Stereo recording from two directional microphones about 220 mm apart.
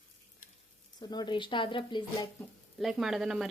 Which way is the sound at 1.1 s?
20° left (ahead or behind).